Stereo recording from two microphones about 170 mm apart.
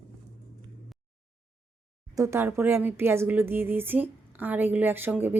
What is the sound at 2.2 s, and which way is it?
A woman's voice, 15° right (ahead or behind).